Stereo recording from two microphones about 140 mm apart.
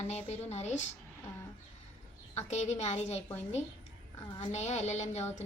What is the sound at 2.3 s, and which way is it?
Speech, 50° left (ahead or behind).